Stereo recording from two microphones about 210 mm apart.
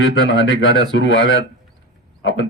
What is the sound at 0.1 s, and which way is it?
Speech, 60° left (ahead or behind).